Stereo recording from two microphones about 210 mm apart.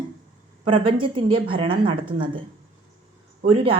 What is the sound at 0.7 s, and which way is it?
A woman's voice, 25° right (ahead or behind).